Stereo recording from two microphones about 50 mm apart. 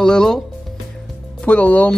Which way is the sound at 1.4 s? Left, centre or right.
Left.